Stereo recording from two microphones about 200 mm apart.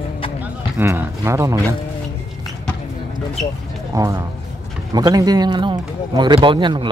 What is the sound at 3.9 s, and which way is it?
A man's voice, 15° right (ahead or behind).